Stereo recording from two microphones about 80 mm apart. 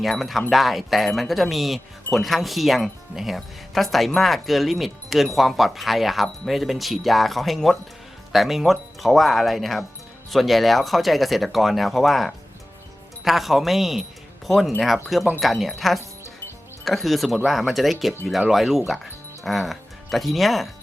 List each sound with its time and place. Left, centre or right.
0.0 s speech: centre
16.8 s speech: centre